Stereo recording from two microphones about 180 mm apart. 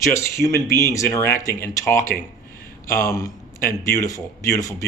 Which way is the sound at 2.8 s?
15° left (ahead or behind).